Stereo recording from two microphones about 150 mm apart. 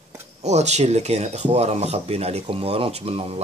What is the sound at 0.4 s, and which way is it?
Speech, 50° right (ahead or behind).